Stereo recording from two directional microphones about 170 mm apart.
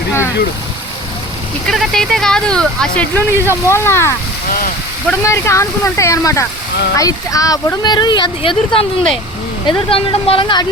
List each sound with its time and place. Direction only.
1.6 s speech: centre (ahead or behind)
3.3 s speech: 15° right (ahead or behind)
3.7 s speech: 15° left (ahead or behind)